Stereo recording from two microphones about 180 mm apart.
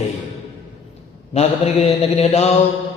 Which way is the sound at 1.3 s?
35° left (ahead or behind).